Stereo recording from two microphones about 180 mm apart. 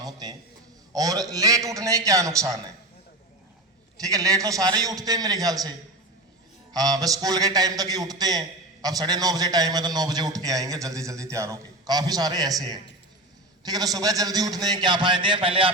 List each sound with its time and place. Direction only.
0.0 s a sound: 20° right (ahead or behind)
0.9 s a man's voice: 20° right (ahead or behind)
4.0 s a man's voice: 20° right (ahead or behind)
6.7 s a man's voice: 20° right (ahead or behind)